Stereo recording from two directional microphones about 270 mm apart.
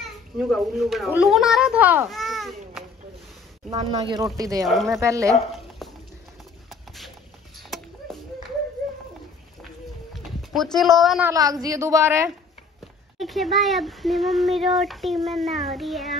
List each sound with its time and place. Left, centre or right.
0.0 s a child's voice: centre
3.7 s a woman's voice: right
4.6 s speech: centre
5.0 s a woman's voice: centre
5.8 s clip-clop: centre
10.1 s a woman's voice: centre
13.2 s speech: centre